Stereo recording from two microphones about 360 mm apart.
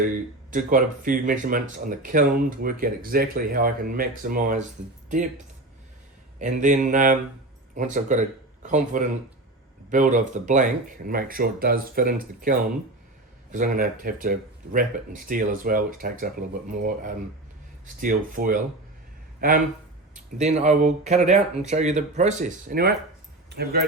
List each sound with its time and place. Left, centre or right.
0.5 s speech: right
6.4 s speech: right
17.8 s speech: right